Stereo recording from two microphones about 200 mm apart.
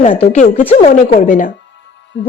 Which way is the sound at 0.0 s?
35° left (ahead or behind).